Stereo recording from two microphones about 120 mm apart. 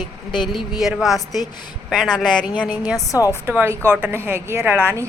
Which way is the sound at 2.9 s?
30° left (ahead or behind).